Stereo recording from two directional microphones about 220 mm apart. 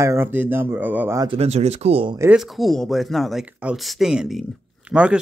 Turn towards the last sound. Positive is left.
turn(degrees=-5)  # may be behind; listen again after turning